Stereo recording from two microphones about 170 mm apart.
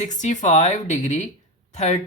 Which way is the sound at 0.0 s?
45° left (ahead or behind).